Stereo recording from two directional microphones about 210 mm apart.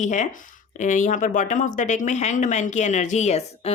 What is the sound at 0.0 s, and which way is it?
Speech, 35° left (ahead or behind).